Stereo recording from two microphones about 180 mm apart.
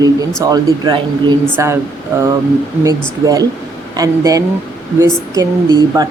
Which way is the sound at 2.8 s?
20° right (ahead or behind).